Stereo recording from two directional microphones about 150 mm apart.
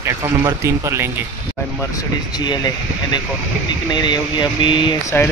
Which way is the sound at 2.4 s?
30° left (ahead or behind).